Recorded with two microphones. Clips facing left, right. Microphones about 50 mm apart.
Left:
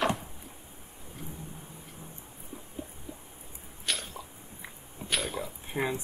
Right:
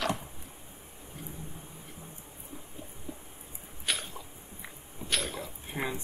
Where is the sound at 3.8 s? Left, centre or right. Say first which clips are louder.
Even; centre.